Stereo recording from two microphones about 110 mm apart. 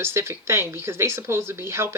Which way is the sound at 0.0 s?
25° right (ahead or behind).